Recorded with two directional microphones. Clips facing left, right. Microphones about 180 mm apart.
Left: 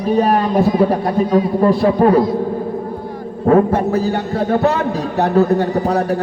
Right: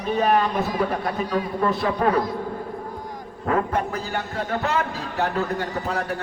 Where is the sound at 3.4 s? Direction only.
25° left (ahead or behind).